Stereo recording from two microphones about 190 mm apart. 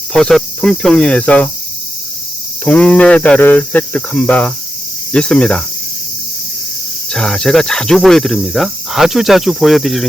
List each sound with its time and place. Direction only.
0.1 s speech: 5° left (ahead or behind)
2.6 s speech: 5° left (ahead or behind)
7.1 s speech: 5° left (ahead or behind)